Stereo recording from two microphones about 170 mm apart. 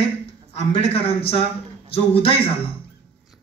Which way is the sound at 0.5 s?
35° left (ahead or behind).